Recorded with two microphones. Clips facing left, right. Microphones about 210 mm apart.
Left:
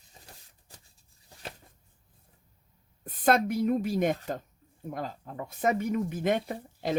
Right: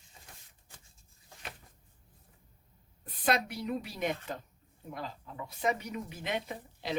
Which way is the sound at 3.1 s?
45° left (ahead or behind).